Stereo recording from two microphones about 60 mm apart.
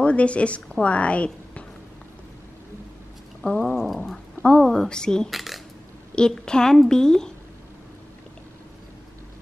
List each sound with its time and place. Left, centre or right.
0.0 s a woman's voice: left
3.4 s a woman's voice: centre
3.7 s a sound: centre
4.4 s a woman's voice: centre
5.3 s speech: centre
6.1 s a woman's voice: centre